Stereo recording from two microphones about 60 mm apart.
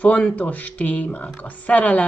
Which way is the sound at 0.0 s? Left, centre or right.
Left.